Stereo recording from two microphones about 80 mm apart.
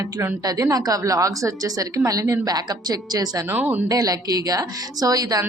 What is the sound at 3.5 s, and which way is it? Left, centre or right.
Speech, right.